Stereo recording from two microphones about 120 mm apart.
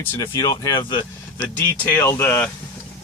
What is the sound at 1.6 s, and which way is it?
Speech, 20° left (ahead or behind).